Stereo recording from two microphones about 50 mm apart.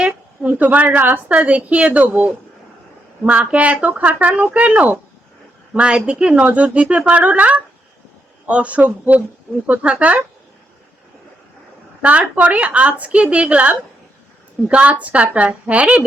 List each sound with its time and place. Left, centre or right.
0.4 s a woman's voice: right
3.5 s a woman's voice: right
12.0 s a woman's voice: right